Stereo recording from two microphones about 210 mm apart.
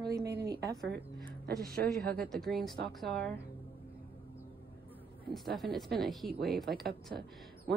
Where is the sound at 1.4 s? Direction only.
45° right (ahead or behind).